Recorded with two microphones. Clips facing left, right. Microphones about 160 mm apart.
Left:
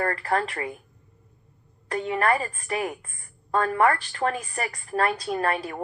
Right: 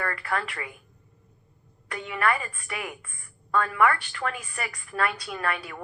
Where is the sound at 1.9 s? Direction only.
35° left (ahead or behind).